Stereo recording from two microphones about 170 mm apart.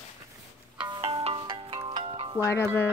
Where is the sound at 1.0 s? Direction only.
35° right (ahead or behind).